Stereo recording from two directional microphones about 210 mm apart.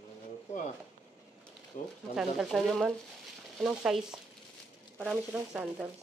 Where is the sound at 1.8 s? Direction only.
35° left (ahead or behind).